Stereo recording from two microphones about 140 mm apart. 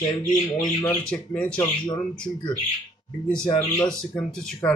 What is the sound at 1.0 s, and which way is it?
Speech, 5° left (ahead or behind).